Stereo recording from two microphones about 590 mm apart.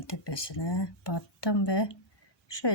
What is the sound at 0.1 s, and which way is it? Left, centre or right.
Speech, left.